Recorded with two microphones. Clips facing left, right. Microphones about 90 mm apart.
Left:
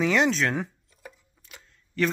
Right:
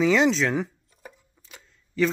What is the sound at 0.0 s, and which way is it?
Speech, centre (ahead or behind).